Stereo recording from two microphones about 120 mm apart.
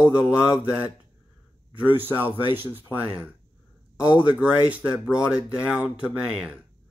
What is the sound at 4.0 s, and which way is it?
Speech, 10° right (ahead or behind).